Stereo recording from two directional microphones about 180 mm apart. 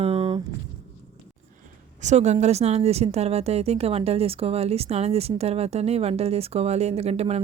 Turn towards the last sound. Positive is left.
turn(degrees=-35)  # may be behind; listen again after turning